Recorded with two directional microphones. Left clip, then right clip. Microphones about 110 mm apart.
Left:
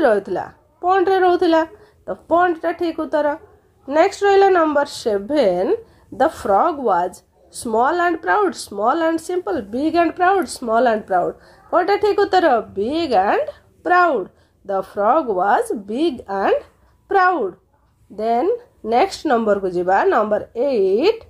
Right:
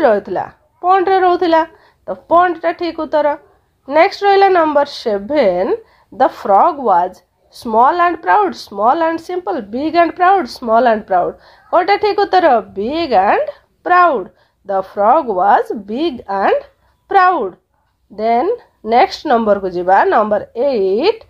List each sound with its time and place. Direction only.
0.0 s a woman's voice: 15° right (ahead or behind)